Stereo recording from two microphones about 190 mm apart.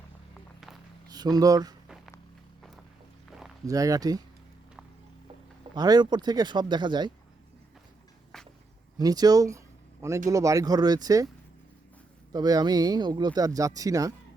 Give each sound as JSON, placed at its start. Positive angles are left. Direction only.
{"t": 1.1, "sound": "speech", "side_deg": -20}
{"t": 3.7, "sound": "speech", "side_deg": -20}
{"t": 5.7, "sound": "speech", "side_deg": -20}
{"t": 9.0, "sound": "speech", "side_deg": -20}
{"t": 12.3, "sound": "speech", "side_deg": -20}